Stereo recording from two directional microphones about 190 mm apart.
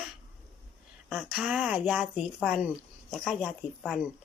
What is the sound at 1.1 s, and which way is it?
Speech, centre (ahead or behind).